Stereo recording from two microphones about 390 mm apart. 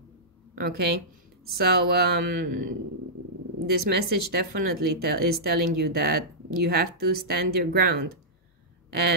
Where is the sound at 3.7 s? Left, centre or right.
Right.